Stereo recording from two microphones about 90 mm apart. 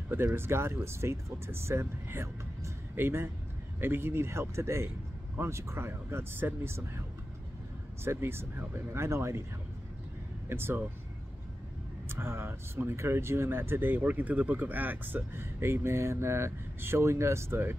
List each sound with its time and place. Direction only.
0.1 s speech: 25° right (ahead or behind)
8.0 s speech: 30° right (ahead or behind)
10.5 s speech: 25° right (ahead or behind)
12.1 s speech: 25° right (ahead or behind)